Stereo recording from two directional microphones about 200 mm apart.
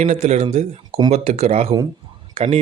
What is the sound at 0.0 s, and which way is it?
Speech, 35° right (ahead or behind).